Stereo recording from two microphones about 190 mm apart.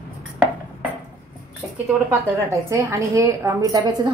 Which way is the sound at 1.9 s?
10° right (ahead or behind).